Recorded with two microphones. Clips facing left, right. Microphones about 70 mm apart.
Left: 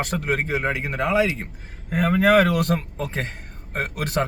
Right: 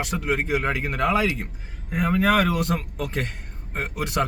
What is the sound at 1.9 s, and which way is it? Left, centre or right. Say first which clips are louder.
Speech: left 3 dB; left.